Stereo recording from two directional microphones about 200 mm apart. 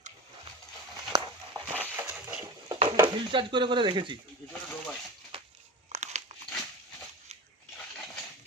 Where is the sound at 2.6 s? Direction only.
20° right (ahead or behind).